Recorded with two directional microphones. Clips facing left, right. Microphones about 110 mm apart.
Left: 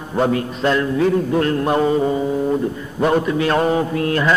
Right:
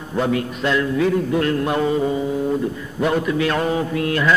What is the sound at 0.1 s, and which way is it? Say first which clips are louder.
Mantra: left 2 dB; 35° left (ahead or behind).